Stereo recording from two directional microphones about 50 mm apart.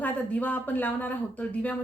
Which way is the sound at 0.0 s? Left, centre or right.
Left.